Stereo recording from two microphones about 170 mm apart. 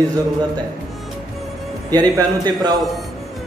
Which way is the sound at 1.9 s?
25° right (ahead or behind).